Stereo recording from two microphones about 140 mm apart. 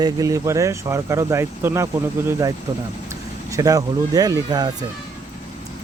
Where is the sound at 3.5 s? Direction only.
25° right (ahead or behind).